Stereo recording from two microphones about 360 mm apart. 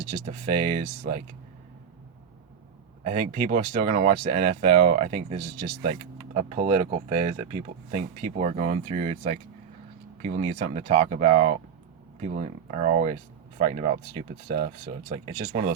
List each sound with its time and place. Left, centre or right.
0.3 s speech: centre
3.0 s speech: centre